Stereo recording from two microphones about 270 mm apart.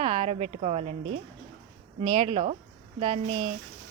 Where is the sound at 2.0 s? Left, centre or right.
Centre.